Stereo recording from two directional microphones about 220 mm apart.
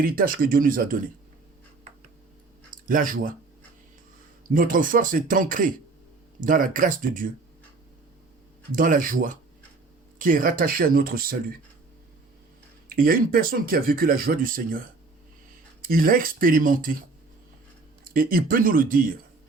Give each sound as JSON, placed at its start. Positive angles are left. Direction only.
{"t": 0.0, "sound": "speech", "side_deg": -40}
{"t": 2.6, "sound": "speech", "side_deg": -40}
{"t": 4.4, "sound": "speech", "side_deg": -40}
{"t": 8.7, "sound": "speech", "side_deg": -40}
{"t": 12.9, "sound": "speech", "side_deg": -40}
{"t": 15.8, "sound": "speech", "side_deg": -40}
{"t": 18.0, "sound": "speech", "side_deg": -40}